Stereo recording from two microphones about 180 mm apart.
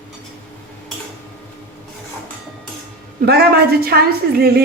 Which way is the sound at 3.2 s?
60° right (ahead or behind).